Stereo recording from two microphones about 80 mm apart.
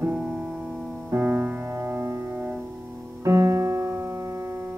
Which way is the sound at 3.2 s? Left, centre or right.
Right.